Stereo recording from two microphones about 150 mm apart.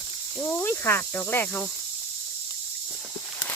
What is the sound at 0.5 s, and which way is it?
Speech, 15° left (ahead or behind).